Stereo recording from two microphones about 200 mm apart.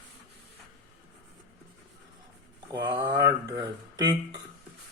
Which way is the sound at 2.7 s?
15° right (ahead or behind).